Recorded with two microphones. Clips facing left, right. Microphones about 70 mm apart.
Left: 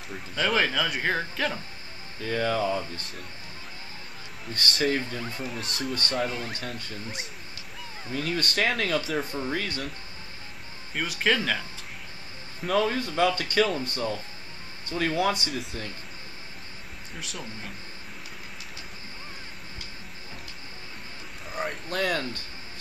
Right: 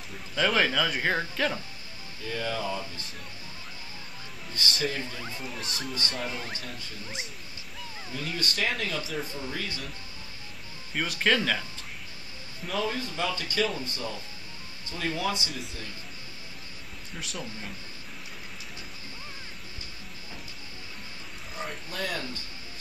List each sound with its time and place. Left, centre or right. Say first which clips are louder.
0.4 s speech: even; centre
2.2 s speech: left 6 dB; left
4.8 s speech: left 9 dB; left
5.2 s speech: left 3 dB; centre
5.9 s speech: left 6 dB; left
6.2 s speech: left 4 dB; centre
8.1 s speech: left 5 dB; left
11.0 s speech: even; centre
12.6 s speech: left 6 dB; left
17.2 s speech: right 1 dB; centre
21.5 s speech: left 6 dB; left